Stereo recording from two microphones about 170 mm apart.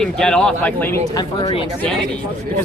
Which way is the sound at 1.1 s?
30° left (ahead or behind).